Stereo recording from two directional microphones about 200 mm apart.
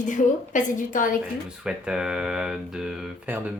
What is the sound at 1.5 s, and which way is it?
Speech, 5° right (ahead or behind).